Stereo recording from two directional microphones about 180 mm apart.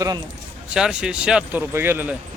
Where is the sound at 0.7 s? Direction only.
5° right (ahead or behind).